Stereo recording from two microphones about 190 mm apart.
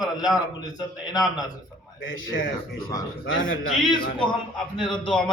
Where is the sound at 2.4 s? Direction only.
50° left (ahead or behind).